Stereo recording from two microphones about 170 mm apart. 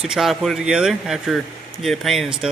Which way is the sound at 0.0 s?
Centre (ahead or behind).